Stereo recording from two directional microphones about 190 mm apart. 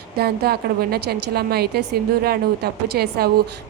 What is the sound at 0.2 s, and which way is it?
A woman's voice, 55° right (ahead or behind).